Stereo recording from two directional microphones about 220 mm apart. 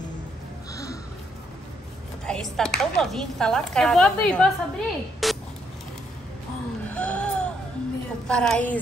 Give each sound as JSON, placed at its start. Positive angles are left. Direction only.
{"t": 2.2, "sound": "speech", "side_deg": 5}
{"t": 6.9, "sound": "music", "side_deg": 5}
{"t": 8.3, "sound": "speech", "side_deg": 5}